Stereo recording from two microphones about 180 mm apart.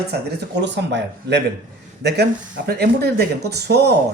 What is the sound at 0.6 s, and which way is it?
Speech, 75° right (ahead or behind).